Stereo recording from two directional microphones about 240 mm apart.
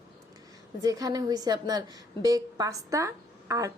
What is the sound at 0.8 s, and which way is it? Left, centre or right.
Speech, centre.